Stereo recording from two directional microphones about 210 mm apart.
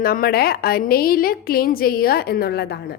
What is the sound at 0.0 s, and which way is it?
A woman's voice, 45° left (ahead or behind).